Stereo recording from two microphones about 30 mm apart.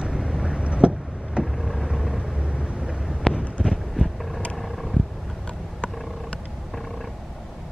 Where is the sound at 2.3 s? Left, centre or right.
Right.